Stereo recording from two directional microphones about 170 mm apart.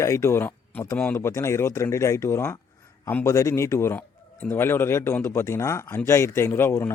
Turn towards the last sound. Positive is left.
turn(degrees=15)  # may be behind; listen again after turning